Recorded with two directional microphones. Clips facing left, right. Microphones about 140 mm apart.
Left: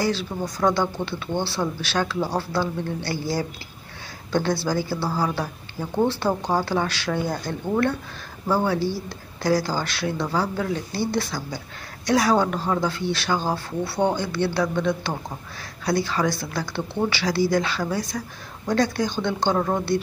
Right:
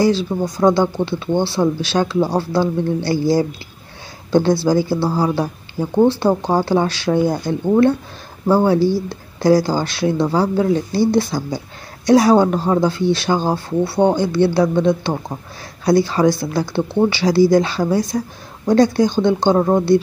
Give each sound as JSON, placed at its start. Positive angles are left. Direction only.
{"t": 0.0, "sound": "speech", "side_deg": -25}